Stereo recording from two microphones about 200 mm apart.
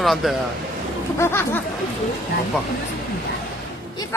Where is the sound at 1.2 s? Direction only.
10° left (ahead or behind).